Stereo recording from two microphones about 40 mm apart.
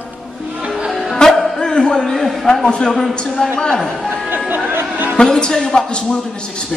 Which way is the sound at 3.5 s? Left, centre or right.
Left.